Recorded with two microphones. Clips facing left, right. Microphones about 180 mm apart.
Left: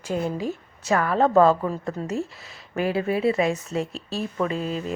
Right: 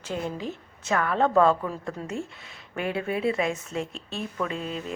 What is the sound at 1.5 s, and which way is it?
Speech, 30° left (ahead or behind).